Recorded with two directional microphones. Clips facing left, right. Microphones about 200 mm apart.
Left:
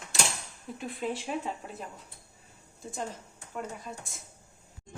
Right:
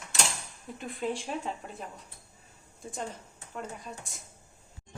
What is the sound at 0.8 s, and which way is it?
Speech, 5° left (ahead or behind).